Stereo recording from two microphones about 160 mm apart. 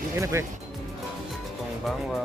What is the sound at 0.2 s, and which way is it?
Speech, 15° right (ahead or behind).